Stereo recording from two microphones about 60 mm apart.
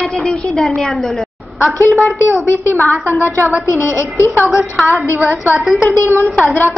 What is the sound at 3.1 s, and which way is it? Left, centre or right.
Speech, left.